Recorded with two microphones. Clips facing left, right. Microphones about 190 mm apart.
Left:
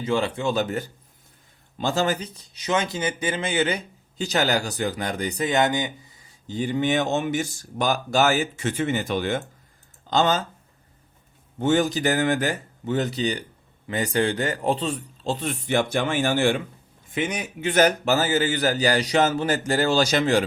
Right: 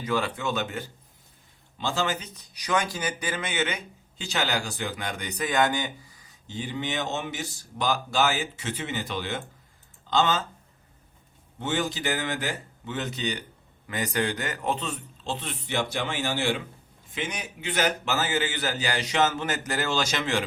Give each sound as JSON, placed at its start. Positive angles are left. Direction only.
{"t": 0.0, "sound": "speech", "side_deg": 25}
{"t": 6.5, "sound": "speech", "side_deg": 45}
{"t": 11.6, "sound": "speech", "side_deg": 45}